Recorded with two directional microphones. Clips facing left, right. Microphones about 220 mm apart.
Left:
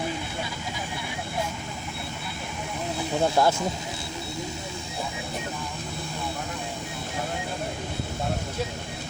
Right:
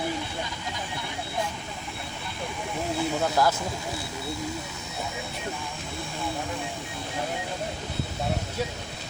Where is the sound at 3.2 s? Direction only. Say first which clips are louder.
Left 4 dB; 30° left (ahead or behind).